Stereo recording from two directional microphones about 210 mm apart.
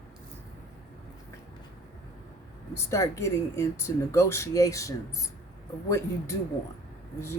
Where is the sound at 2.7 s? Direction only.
15° left (ahead or behind).